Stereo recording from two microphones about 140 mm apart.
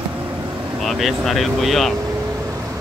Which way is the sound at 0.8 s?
Centre (ahead or behind).